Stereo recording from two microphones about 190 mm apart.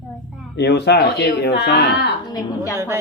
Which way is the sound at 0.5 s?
60° left (ahead or behind).